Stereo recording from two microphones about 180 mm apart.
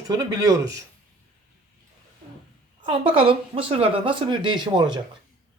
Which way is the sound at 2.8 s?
30° right (ahead or behind).